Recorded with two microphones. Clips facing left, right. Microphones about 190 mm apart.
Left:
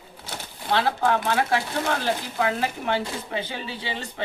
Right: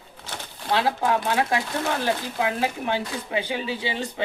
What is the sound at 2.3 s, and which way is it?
Speech, 15° right (ahead or behind).